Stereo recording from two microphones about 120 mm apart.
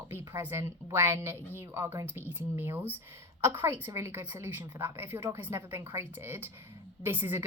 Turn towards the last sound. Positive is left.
turn(degrees=-20)  # may be behind; listen again after turning